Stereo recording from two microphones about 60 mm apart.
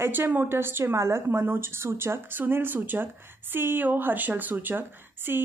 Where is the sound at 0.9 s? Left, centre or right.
Right.